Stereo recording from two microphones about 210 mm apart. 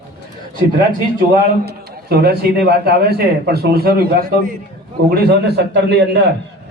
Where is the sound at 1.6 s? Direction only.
50° right (ahead or behind).